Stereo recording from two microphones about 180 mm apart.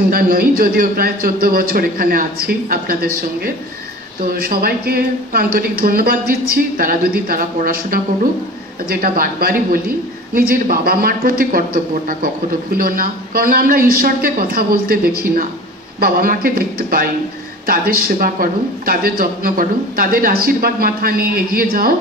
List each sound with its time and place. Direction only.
0.1 s speech: 55° right (ahead or behind)